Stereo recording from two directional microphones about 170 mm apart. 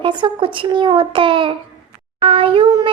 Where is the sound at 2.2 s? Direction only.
30° right (ahead or behind).